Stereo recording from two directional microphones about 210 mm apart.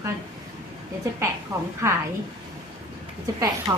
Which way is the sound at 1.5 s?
15° right (ahead or behind).